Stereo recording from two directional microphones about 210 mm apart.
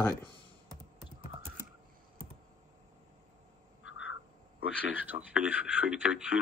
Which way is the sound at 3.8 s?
65° left (ahead or behind).